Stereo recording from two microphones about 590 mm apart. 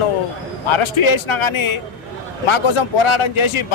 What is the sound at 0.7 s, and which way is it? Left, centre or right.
Speech, left.